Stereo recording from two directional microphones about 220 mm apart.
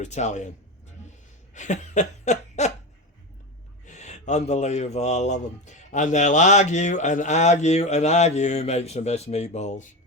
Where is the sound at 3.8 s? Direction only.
30° left (ahead or behind).